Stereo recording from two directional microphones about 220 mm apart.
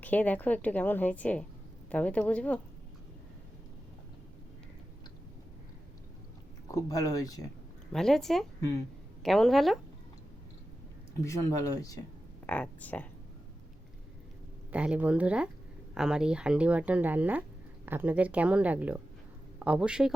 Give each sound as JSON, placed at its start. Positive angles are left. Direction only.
{"t": 0.0, "sound": "a woman's voice", "side_deg": 5}
{"t": 6.7, "sound": "a woman's voice", "side_deg": 15}
{"t": 7.9, "sound": "speech", "side_deg": 0}
{"t": 11.2, "sound": "a woman's voice", "side_deg": 15}
{"t": 14.7, "sound": "a man's voice", "side_deg": -5}